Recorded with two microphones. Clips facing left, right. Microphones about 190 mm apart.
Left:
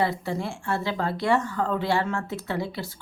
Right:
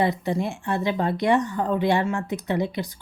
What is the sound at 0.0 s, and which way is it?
Speech, 20° right (ahead or behind).